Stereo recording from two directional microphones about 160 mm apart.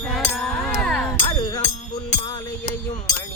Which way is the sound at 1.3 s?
25° left (ahead or behind).